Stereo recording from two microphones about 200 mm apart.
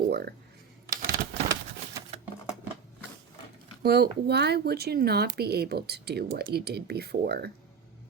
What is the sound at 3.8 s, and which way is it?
Speech, 55° right (ahead or behind).